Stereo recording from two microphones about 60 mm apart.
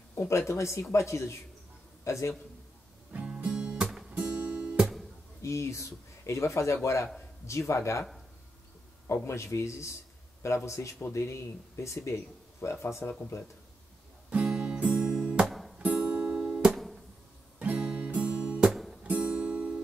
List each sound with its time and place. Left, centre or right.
0.1 s a man's voice: left
3.3 s music: centre
4.7 s guitar: centre
5.4 s speech: left
9.0 s a man's voice: left
14.3 s music: centre
15.4 s music: centre
15.8 s music: right
16.3 s music: centre
17.6 s music: right
18.7 s music: centre
19.0 s music: right